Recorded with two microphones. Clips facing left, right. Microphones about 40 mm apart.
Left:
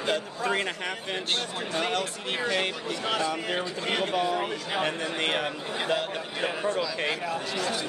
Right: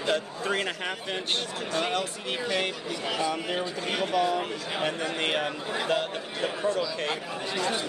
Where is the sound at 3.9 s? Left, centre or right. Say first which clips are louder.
Right 1 dB; left.